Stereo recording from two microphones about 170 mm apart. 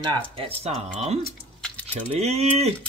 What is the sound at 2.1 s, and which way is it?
Speech, 40° right (ahead or behind).